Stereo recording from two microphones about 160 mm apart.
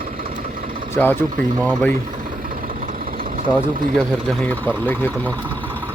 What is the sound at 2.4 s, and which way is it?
Vehicle, 65° right (ahead or behind).